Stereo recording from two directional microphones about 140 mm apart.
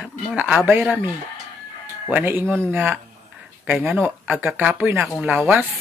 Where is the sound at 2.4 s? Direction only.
5° left (ahead or behind).